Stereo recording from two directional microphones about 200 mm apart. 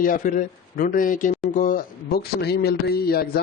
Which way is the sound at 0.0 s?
45° left (ahead or behind).